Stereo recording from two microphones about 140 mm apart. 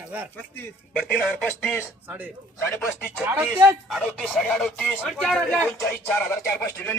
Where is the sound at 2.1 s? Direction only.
10° right (ahead or behind).